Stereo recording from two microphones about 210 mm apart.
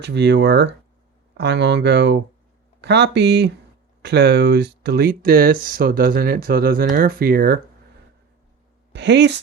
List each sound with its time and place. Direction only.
0.0 s speech: 55° right (ahead or behind)
8.9 s a woman's voice: 55° right (ahead or behind)